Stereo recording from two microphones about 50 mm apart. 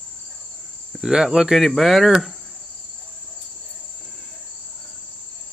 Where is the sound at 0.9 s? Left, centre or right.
Centre.